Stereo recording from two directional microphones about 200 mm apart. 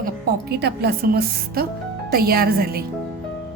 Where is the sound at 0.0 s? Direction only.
55° right (ahead or behind).